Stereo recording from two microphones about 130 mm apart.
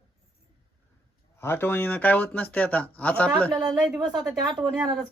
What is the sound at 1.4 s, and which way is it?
Speech, 15° left (ahead or behind).